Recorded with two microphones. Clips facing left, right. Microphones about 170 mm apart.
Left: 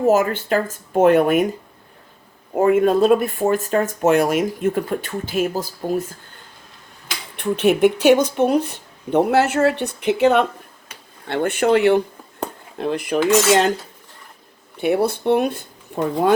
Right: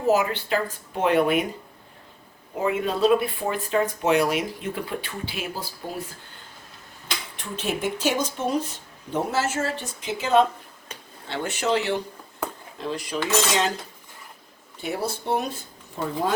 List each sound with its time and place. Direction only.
0.0 s speech: 50° left (ahead or behind)
2.6 s speech: 50° left (ahead or behind)
7.3 s speech: 60° left (ahead or behind)
14.8 s speech: 60° left (ahead or behind)